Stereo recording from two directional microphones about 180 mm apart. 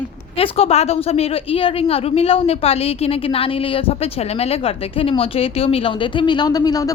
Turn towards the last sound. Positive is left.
turn(degrees=20)  # may be behind; listen again after turning